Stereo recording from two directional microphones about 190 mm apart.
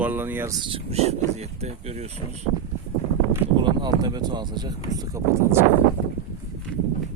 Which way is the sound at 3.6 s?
20° right (ahead or behind).